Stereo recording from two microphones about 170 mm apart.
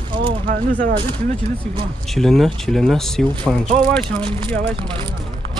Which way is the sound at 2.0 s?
Centre (ahead or behind).